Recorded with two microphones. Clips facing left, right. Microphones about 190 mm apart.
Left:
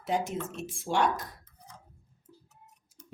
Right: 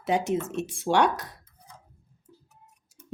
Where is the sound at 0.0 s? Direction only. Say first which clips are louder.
Right 5 dB; 75° right (ahead or behind).